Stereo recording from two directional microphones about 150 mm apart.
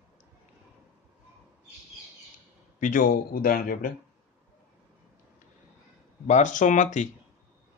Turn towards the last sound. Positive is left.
turn(degrees=55)  # may be behind; listen again after turning